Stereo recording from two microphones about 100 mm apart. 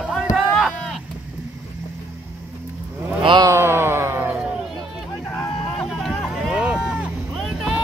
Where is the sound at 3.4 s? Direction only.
25° right (ahead or behind).